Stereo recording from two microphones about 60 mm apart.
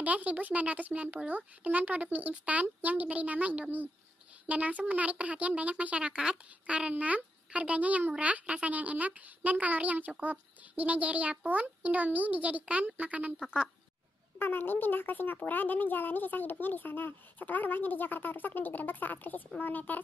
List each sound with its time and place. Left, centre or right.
0.0 s speech: right
14.4 s speech: left